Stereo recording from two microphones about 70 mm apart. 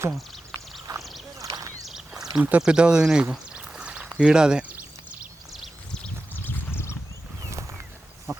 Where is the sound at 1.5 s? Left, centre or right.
Right.